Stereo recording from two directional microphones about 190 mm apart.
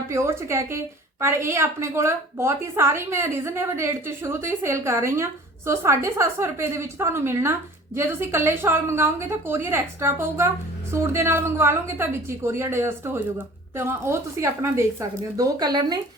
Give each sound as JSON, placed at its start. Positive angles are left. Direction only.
{"t": 0.1, "sound": "a woman's voice", "side_deg": -15}